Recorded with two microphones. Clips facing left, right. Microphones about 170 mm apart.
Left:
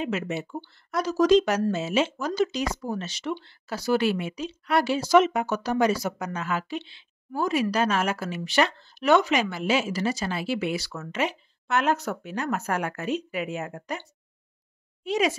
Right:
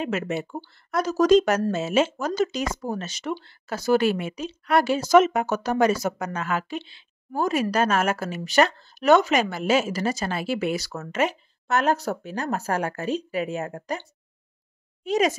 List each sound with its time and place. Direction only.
0.0 s speech: 50° right (ahead or behind)
15.0 s speech: 45° right (ahead or behind)